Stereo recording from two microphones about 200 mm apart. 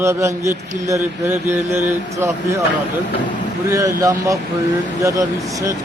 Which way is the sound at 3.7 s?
15° right (ahead or behind).